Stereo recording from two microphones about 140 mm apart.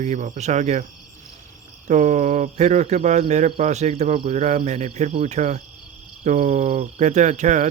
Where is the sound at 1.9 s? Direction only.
60° right (ahead or behind).